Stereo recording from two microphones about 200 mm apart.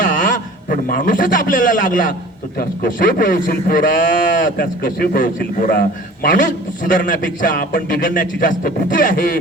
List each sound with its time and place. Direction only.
0.0 s a man's voice: 40° left (ahead or behind)